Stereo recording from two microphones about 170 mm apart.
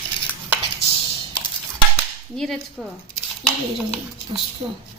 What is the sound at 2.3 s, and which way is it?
Speech, centre (ahead or behind).